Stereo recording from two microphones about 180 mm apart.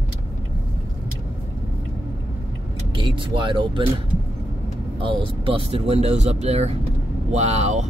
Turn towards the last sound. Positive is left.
turn(degrees=-40)  # may be behind; listen again after turning